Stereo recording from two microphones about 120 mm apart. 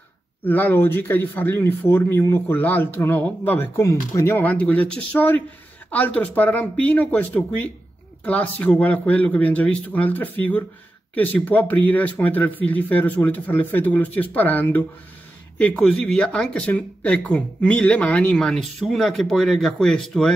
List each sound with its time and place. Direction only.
0.4 s speech: 15° left (ahead or behind)
3.7 s speech: 25° left (ahead or behind); by 20.3 s 5° left (ahead or behind)